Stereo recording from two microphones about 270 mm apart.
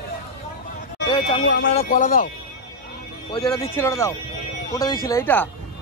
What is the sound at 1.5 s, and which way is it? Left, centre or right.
Speech, left.